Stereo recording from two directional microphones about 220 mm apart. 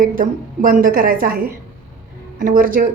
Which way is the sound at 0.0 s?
40° right (ahead or behind).